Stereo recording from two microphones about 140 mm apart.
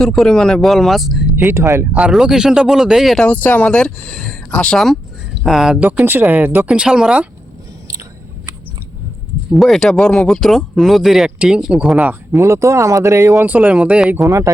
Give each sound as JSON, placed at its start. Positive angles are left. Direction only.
{"t": 0.0, "sound": "speech", "side_deg": 5}
{"t": 1.5, "sound": "speech", "side_deg": -20}
{"t": 3.2, "sound": "speech", "side_deg": 10}
{"t": 9.5, "sound": "speech", "side_deg": 0}
{"t": 14.3, "sound": "speech", "side_deg": -20}